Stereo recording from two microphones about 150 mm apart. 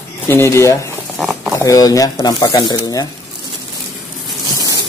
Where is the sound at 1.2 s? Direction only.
10° right (ahead or behind).